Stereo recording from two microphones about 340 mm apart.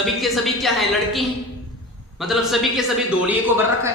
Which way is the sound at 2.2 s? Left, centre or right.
Centre.